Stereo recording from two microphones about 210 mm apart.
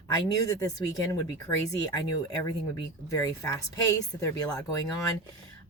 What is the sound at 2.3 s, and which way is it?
Speech, 15° left (ahead or behind).